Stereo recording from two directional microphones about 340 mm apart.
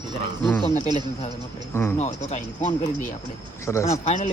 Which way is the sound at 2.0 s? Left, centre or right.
Centre.